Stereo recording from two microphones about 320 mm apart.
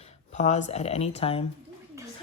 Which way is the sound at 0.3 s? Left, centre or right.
Left.